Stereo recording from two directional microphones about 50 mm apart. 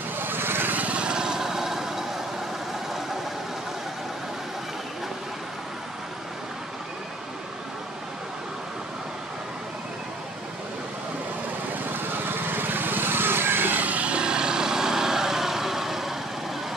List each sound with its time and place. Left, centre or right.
0.2 s vehicle: right
0.8 s vehicle: right
11.8 s vehicle: right; by 16.2 s centre